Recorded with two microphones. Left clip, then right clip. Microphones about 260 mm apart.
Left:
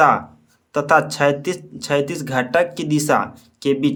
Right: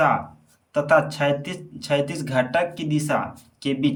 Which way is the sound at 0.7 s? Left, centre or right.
Centre.